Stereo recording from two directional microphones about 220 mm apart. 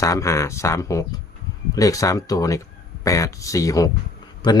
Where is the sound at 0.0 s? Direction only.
15° left (ahead or behind).